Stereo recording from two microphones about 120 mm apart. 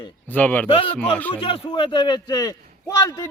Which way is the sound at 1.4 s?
45° left (ahead or behind).